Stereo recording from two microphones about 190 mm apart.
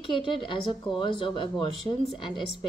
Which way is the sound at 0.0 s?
25° left (ahead or behind).